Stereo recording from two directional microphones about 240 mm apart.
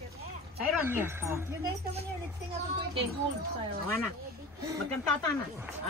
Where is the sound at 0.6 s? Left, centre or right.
Centre.